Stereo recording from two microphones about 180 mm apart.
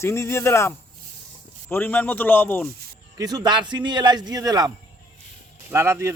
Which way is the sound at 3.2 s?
20° right (ahead or behind).